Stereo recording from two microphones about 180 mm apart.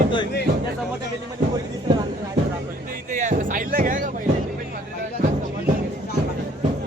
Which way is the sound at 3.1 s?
45° right (ahead or behind).